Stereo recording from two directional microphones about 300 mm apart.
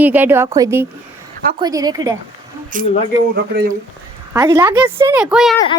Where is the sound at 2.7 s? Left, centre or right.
Right.